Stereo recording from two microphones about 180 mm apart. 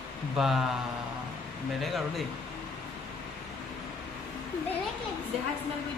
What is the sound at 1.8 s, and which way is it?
Speech, centre (ahead or behind).